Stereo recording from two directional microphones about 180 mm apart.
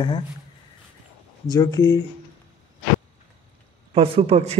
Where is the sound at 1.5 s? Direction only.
20° left (ahead or behind).